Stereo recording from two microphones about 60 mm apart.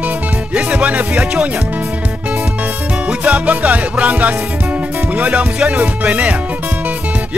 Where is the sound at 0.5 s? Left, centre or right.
Right.